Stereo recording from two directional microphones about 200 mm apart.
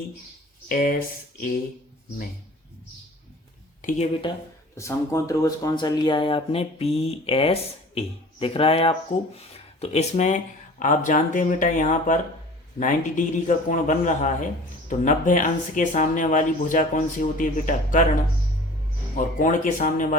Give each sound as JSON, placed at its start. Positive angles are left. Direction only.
{"t": 0.7, "sound": "speech", "side_deg": 45}
{"t": 3.8, "sound": "a sound", "side_deg": 40}
{"t": 4.2, "sound": "speech", "side_deg": 20}
{"t": 19.1, "sound": "speech", "side_deg": 40}